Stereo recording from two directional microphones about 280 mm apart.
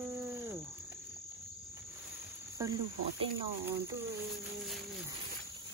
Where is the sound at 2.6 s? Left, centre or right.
Centre.